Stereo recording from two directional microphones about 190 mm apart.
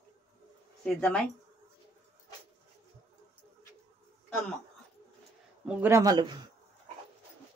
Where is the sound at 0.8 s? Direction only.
5° left (ahead or behind).